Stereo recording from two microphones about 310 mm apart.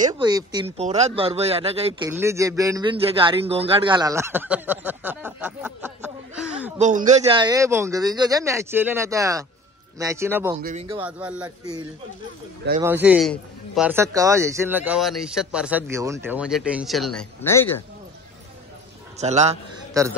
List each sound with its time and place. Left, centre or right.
0.0 s speech: centre
2.0 s a man's voice: centre
6.8 s a man's voice: right; by 10.6 s centre
10.6 s speech: right
11.0 s a man's voice: centre
12.8 s a man's voice: centre
19.1 s a man's voice: right